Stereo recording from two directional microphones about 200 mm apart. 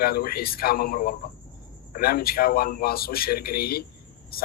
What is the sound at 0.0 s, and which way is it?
A man's voice, 50° left (ahead or behind).